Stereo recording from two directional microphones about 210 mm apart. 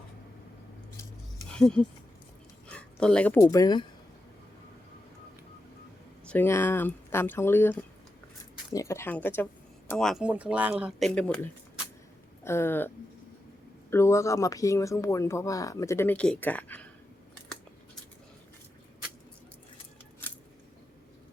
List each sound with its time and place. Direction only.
1.5 s speech: 5° left (ahead or behind)
2.6 s a sound: 5° left (ahead or behind)
3.5 s speech: 20° left (ahead or behind)
6.2 s speech: 10° left (ahead or behind)
12.5 s speech: 10° left (ahead or behind)
13.9 s speech: 15° left (ahead or behind)